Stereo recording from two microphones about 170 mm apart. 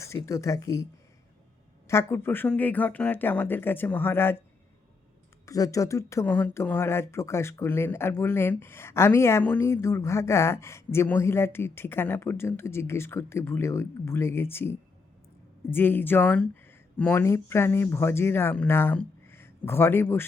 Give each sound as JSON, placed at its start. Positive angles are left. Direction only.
{"t": 0.2, "sound": "speech", "side_deg": 20}
{"t": 1.9, "sound": "speech", "side_deg": 15}
{"t": 5.5, "sound": "speech", "side_deg": 20}